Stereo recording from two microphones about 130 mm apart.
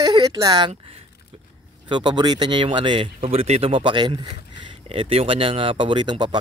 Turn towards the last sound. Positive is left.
turn(degrees=-35)  # may be behind; listen again after turning